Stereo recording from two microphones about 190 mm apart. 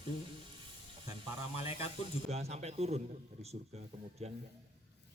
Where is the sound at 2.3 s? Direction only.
35° right (ahead or behind).